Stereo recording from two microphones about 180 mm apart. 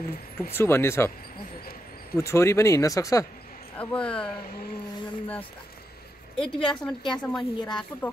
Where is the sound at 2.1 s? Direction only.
15° left (ahead or behind).